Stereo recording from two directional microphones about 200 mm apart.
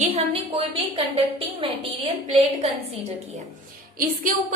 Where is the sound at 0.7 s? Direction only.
25° right (ahead or behind).